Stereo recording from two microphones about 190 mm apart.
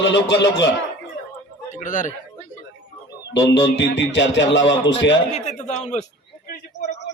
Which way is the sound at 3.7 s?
70° left (ahead or behind).